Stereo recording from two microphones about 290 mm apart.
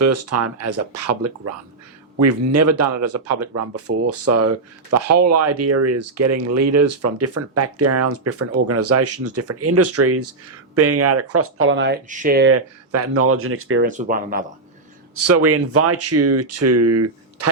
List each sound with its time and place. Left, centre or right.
0.0 s speech: right
12.5 s speech: right
13.8 s speech: right
15.1 s speech: right